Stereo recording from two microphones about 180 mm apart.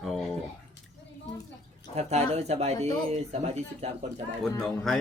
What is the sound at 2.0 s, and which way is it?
Speech, 35° right (ahead or behind).